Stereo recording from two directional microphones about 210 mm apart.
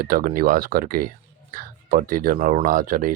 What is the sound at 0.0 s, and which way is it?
Speech, 40° right (ahead or behind).